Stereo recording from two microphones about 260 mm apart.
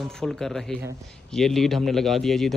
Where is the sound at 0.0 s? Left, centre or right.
Centre.